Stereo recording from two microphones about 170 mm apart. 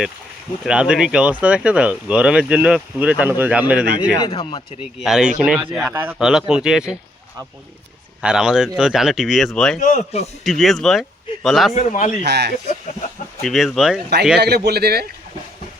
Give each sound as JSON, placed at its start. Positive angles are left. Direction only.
{"t": 0.6, "sound": "speech", "side_deg": -5}
{"t": 4.2, "sound": "speech", "side_deg": 30}
{"t": 4.8, "sound": "speech", "side_deg": -5}
{"t": 8.2, "sound": "speech", "side_deg": -5}
{"t": 9.8, "sound": "a man's voice", "side_deg": 45}
{"t": 10.4, "sound": "speech", "side_deg": 0}
{"t": 11.7, "sound": "a man's voice", "side_deg": 45}
{"t": 12.2, "sound": "speech", "side_deg": -80}
{"t": 13.4, "sound": "speech", "side_deg": 0}
{"t": 14.3, "sound": "a man's voice", "side_deg": -70}